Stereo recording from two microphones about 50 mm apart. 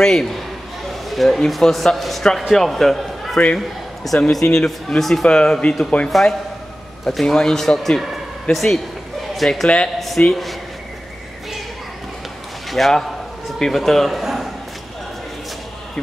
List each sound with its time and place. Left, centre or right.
0.0 s a man's voice: centre
6.0 s speech: centre
12.7 s speech: centre